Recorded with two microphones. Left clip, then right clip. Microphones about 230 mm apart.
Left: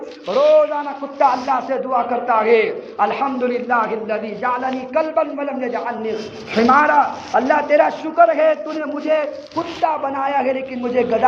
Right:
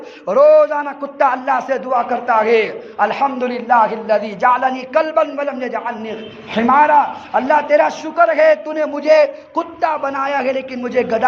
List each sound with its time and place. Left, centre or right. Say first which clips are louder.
0.3 s a man's voice: right 4 dB; right